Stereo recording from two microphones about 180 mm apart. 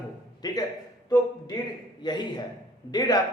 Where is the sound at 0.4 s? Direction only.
20° left (ahead or behind).